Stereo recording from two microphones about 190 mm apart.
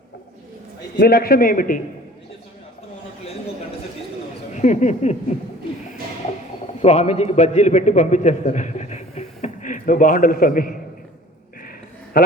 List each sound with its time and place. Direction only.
0.9 s a man's voice: 50° left (ahead or behind)
4.5 s speech: 40° left (ahead or behind)
6.7 s a man's voice: 35° left (ahead or behind)
12.1 s a man's voice: 55° left (ahead or behind)